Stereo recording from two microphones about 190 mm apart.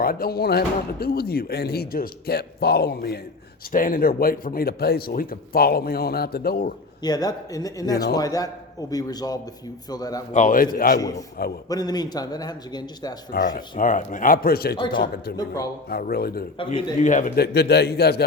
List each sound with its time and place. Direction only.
0.0 s speech: 50° left (ahead or behind)
3.7 s a man's voice: 45° left (ahead or behind)
7.0 s a man's voice: 20° left (ahead or behind)
10.3 s a man's voice: 45° left (ahead or behind)
11.7 s a man's voice: 20° left (ahead or behind)
13.3 s a man's voice: 45° left (ahead or behind)
14.8 s a man's voice: 25° left (ahead or behind)
15.0 s speech: 55° left (ahead or behind)
15.4 s a man's voice: 20° left (ahead or behind)
15.9 s a man's voice: 55° left (ahead or behind)
16.6 s a man's voice: 35° left (ahead or behind)
17.1 s speech: 45° left (ahead or behind)